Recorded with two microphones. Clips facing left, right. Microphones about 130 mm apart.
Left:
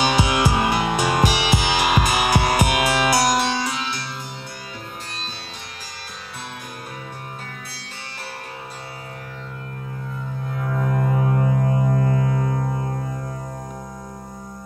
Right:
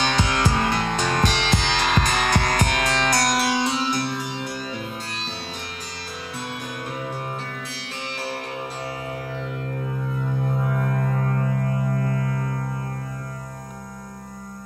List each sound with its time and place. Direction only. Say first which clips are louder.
0.0 s music: left 3 dB; 10° left (ahead or behind)
3.6 s music: right 3 dB; 30° right (ahead or behind)
3.9 s music: right 7 dB; 55° right (ahead or behind)
10.8 s music: left 3 dB; 5° left (ahead or behind)